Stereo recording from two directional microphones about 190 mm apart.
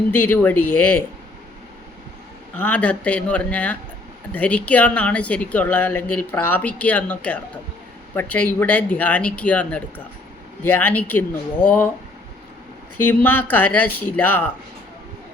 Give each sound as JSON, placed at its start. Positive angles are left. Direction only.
{"t": 0.1, "sound": "speech", "side_deg": 10}
{"t": 2.6, "sound": "speech", "side_deg": 5}
{"t": 13.1, "sound": "speech", "side_deg": 10}